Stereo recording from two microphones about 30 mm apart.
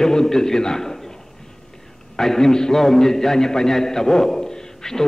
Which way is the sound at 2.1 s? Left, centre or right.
Centre.